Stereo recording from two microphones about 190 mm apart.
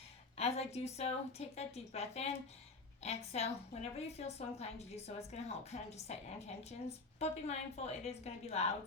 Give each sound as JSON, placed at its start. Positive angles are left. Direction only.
{"t": 0.3, "sound": "a woman's voice", "side_deg": 35}